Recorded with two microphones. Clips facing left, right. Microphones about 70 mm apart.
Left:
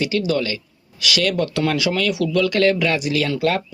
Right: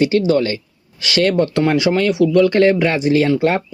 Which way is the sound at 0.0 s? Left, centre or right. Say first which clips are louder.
Right 6 dB; right.